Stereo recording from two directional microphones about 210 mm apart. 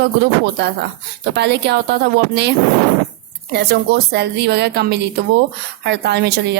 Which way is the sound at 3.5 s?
50° right (ahead or behind).